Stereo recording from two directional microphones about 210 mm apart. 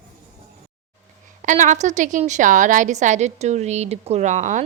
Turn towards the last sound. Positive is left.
turn(degrees=-35)  # may be behind; listen again after turning